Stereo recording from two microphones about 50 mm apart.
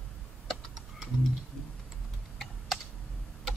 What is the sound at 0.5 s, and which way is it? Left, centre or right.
Typing, centre.